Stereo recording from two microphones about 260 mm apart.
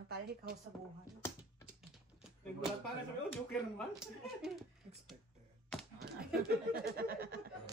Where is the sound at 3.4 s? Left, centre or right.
Centre.